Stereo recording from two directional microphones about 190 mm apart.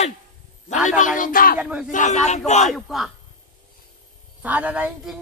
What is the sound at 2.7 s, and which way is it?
Speech, centre (ahead or behind).